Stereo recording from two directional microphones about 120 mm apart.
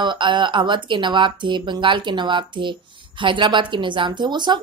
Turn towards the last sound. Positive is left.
turn(degrees=-40)  # may be behind; listen again after turning